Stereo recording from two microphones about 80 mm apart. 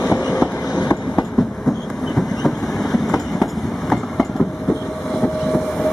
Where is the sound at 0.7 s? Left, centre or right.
Left.